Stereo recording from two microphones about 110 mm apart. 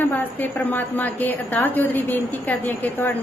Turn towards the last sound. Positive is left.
turn(degrees=20)  # may be behind; listen again after turning